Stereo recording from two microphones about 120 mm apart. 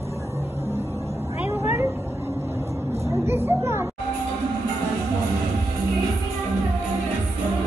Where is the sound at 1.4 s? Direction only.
20° right (ahead or behind).